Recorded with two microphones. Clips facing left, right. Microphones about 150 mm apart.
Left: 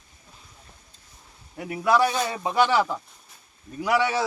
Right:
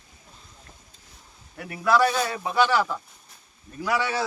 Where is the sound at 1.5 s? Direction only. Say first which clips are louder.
Even; 15° left (ahead or behind).